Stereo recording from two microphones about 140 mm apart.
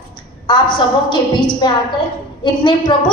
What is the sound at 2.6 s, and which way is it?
Speech, 35° left (ahead or behind).